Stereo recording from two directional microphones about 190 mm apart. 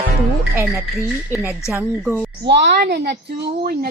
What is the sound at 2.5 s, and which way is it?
A woman's voice, 60° right (ahead or behind).